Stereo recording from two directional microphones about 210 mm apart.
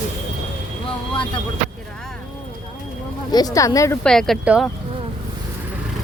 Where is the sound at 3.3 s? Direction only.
15° left (ahead or behind).